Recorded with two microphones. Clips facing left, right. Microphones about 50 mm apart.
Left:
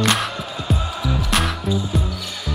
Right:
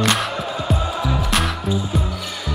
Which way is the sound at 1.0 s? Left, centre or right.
Centre.